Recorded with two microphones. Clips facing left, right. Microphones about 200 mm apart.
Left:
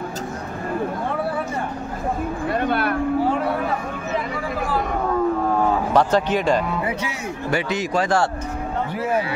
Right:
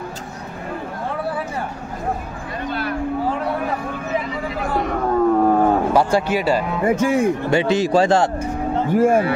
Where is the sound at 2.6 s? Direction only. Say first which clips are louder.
Left 1 dB; 60° left (ahead or behind).